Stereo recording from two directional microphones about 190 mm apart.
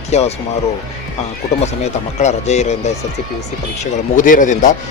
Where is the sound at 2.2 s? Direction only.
35° left (ahead or behind).